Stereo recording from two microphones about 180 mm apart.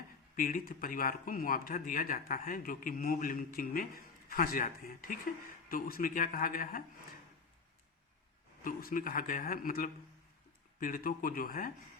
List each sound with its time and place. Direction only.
0.3 s speech: 55° left (ahead or behind)
8.6 s speech: 50° left (ahead or behind)